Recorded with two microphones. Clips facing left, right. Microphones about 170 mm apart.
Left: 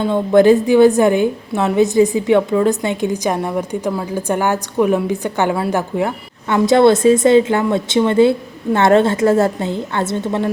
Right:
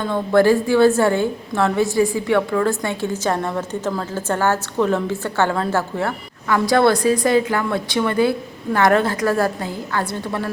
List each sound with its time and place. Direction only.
0.0 s a woman's voice: 15° left (ahead or behind)